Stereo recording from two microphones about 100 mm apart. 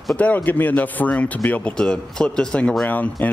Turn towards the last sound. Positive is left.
turn(degrees=15)  # may be behind; listen again after turning